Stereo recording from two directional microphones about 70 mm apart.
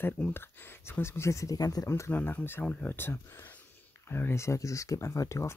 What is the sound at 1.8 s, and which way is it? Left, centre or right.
Speech, left.